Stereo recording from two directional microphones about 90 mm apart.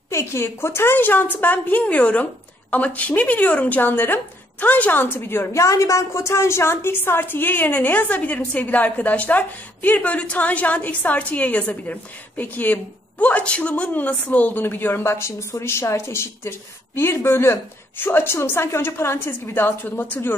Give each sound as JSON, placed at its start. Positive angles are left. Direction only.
{"t": 0.1, "sound": "a woman's voice", "side_deg": 30}